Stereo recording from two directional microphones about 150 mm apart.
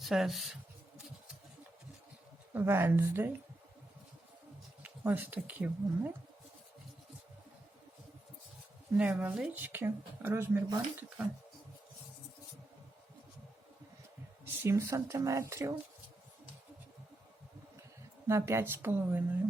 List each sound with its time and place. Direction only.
0.0 s speech: centre (ahead or behind)
2.5 s speech: 15° right (ahead or behind)
4.8 s speech: 10° right (ahead or behind)
9.0 s speech: 10° right (ahead or behind)
14.6 s speech: 20° right (ahead or behind)
18.3 s speech: 15° right (ahead or behind)